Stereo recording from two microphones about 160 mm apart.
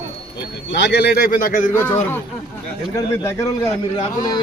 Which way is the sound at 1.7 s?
15° left (ahead or behind).